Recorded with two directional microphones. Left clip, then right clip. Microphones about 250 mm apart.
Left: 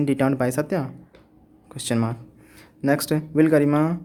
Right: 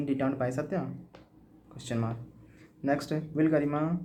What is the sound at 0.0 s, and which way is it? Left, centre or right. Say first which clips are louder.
Speech: left 9 dB; left.